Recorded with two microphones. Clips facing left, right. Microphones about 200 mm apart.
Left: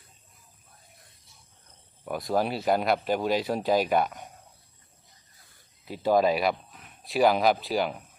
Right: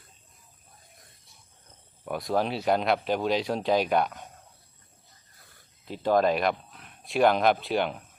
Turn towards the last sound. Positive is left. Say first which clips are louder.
# even
turn(degrees=0)  # may be behind; listen again after turning